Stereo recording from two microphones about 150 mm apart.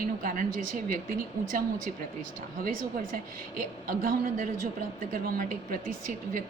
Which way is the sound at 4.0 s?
65° right (ahead or behind).